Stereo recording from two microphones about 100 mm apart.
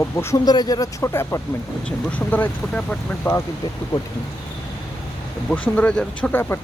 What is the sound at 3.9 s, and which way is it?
Speech, 50° left (ahead or behind).